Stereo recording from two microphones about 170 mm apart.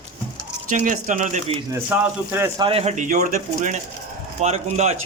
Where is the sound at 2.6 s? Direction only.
35° right (ahead or behind).